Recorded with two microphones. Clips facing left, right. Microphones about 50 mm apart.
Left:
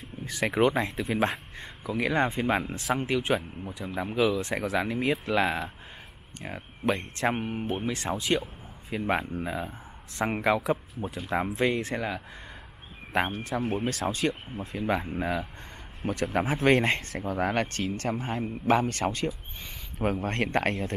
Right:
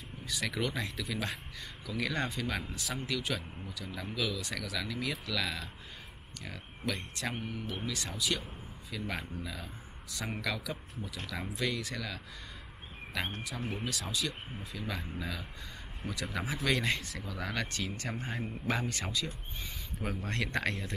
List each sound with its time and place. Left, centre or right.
0.2 s speech: left
13.4 s speech: left